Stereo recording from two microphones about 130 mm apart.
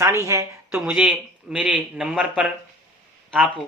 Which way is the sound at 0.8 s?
10° right (ahead or behind).